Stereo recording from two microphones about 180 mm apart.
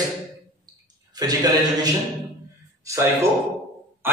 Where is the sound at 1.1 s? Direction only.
20° right (ahead or behind).